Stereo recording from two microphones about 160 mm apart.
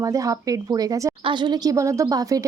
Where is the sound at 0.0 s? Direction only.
20° right (ahead or behind).